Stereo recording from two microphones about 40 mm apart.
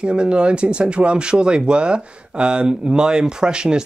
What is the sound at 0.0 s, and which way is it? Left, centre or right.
Speech, right.